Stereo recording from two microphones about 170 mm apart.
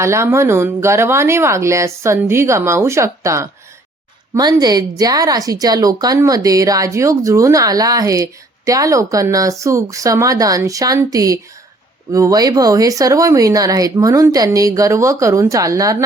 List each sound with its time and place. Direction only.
0.0 s speech: 15° right (ahead or behind)